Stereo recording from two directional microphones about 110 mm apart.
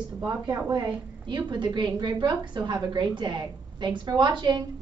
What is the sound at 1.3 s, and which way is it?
A woman's voice, 45° right (ahead or behind).